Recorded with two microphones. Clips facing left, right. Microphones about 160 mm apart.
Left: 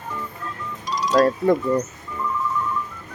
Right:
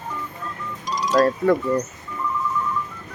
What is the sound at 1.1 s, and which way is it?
Speech, 20° left (ahead or behind).